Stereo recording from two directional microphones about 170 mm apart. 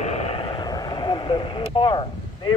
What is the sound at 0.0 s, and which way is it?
Vehicle, 40° left (ahead or behind).